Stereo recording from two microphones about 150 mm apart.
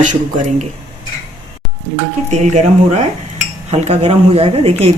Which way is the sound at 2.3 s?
50° right (ahead or behind).